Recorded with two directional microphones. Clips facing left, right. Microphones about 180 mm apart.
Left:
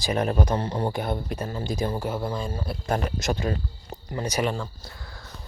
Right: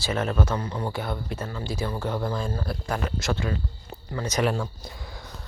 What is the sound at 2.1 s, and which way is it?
Speech, 5° left (ahead or behind).